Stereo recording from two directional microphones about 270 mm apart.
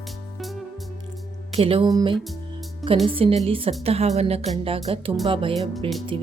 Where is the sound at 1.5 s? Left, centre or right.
Right.